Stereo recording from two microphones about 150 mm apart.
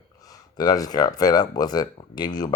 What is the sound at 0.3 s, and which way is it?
Speech, 25° left (ahead or behind).